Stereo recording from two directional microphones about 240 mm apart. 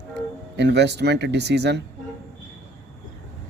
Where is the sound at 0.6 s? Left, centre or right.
Right.